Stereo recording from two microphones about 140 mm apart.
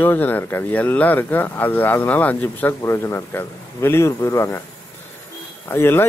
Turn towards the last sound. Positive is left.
turn(degrees=15)  # may be behind; listen again after turning